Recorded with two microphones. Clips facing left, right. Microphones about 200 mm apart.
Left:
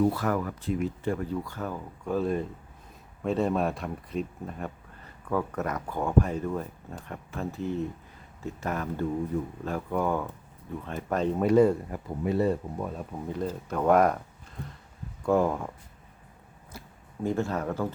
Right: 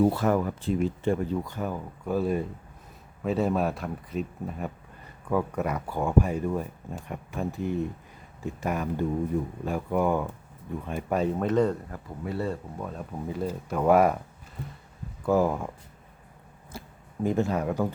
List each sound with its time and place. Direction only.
0.0 s speech: 25° right (ahead or behind); by 11.3 s 10° right (ahead or behind)
11.3 s speech: 10° left (ahead or behind)
12.9 s speech: centre (ahead or behind)
15.2 s speech: 5° right (ahead or behind)
16.7 s a sound: 30° right (ahead or behind)
17.2 s speech: 15° right (ahead or behind)